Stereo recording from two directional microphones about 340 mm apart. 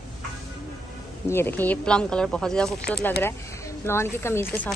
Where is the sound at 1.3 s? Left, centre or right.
Centre.